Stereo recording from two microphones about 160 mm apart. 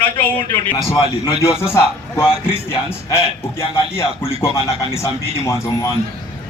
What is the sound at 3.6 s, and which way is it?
Speech, 35° left (ahead or behind).